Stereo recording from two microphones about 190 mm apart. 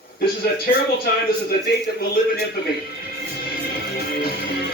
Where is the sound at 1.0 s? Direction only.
55° left (ahead or behind).